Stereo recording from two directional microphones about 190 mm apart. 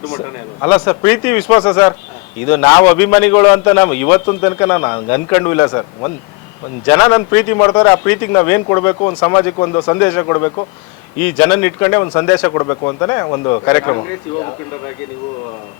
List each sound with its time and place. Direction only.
0.6 s speech: 20° left (ahead or behind)